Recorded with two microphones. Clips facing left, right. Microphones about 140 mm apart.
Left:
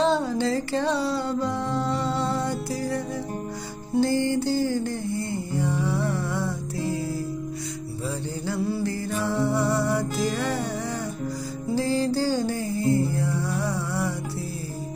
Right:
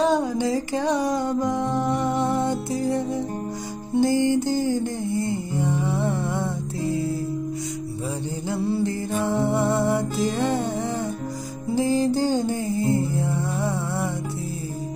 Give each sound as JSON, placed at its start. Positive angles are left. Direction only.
{"t": 0.0, "sound": "music", "side_deg": -15}
{"t": 8.5, "sound": "music", "side_deg": -25}
{"t": 11.7, "sound": "music", "side_deg": -20}